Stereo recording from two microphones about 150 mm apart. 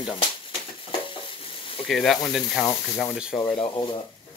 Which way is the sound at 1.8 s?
Centre (ahead or behind).